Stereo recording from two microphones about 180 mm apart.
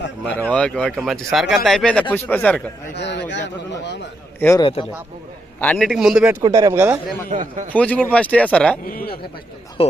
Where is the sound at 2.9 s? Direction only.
70° left (ahead or behind).